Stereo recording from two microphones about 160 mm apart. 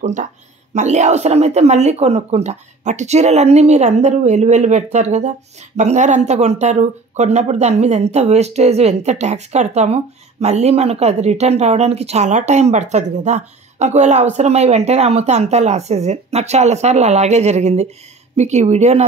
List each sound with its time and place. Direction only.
0.0 s speech: 50° right (ahead or behind)